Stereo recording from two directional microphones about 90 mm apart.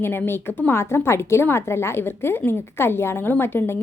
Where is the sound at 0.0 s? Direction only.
25° left (ahead or behind).